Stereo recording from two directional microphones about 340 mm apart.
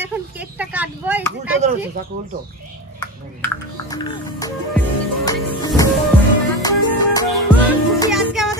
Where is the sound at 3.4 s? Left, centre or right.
Centre.